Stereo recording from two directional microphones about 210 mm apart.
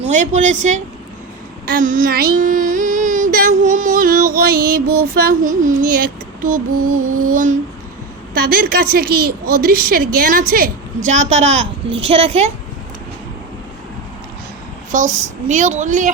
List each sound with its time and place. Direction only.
0.1 s female singing: 35° right (ahead or behind)
1.6 s child singing: 40° right (ahead or behind)
5.1 s female singing: 40° right (ahead or behind)
6.9 s music: 90° right
7.3 s female singing: 40° right (ahead or behind)
8.3 s a woman's voice: 45° right (ahead or behind); by 12.5 s 30° right (ahead or behind)
14.9 s female singing: 35° right (ahead or behind)